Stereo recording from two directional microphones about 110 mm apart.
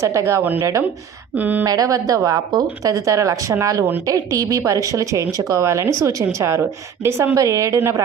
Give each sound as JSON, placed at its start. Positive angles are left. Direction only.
{"t": 0.0, "sound": "speech", "side_deg": -30}
{"t": 1.4, "sound": "speech", "side_deg": -15}
{"t": 1.6, "sound": "speech", "side_deg": -35}